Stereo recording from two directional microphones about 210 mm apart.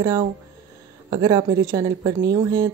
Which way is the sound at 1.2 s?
15° right (ahead or behind).